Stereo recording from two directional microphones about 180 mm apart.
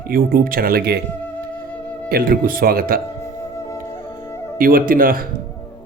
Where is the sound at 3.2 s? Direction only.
15° left (ahead or behind).